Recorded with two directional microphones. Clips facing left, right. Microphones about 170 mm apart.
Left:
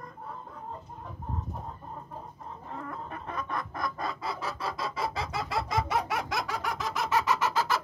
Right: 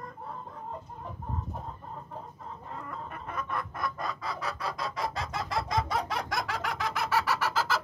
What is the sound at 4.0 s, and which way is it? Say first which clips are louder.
Chicken: left 1 dB; 30° left (ahead or behind).